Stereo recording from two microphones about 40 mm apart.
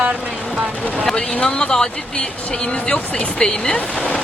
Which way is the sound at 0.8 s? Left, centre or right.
Left.